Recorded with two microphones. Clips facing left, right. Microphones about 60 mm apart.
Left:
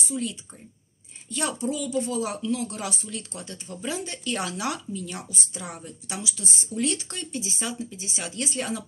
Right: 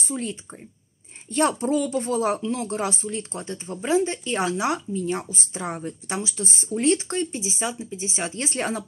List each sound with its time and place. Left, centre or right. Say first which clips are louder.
0.0 s speech: right 1 dB; right